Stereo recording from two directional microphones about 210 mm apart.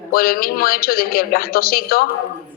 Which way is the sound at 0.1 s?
45° left (ahead or behind).